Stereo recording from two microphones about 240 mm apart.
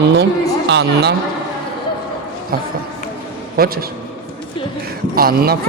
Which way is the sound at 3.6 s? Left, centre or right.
Right.